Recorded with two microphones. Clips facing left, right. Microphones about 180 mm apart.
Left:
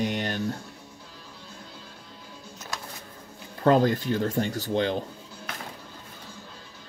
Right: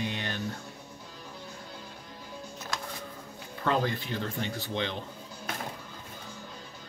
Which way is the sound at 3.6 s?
45° left (ahead or behind).